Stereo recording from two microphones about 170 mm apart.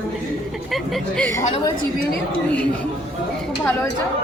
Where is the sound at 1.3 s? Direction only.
15° left (ahead or behind).